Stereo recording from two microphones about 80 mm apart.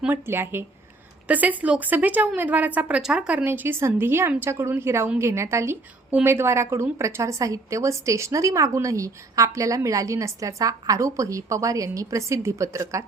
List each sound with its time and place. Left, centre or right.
0.1 s a woman's voice: right
3.4 s a woman's voice: right